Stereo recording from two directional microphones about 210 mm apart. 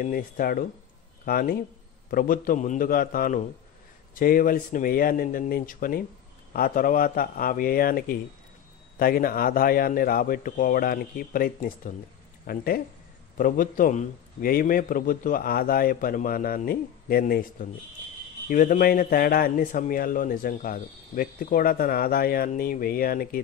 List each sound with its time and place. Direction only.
0.0 s a man's voice: 40° left (ahead or behind)